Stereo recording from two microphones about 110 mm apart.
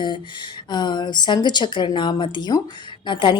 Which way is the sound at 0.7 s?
40° left (ahead or behind).